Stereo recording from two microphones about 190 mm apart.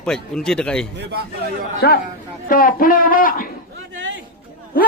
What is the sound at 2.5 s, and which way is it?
A man's voice, 50° left (ahead or behind).